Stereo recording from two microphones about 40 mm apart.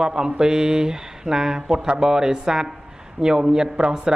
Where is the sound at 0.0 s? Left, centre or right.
Centre.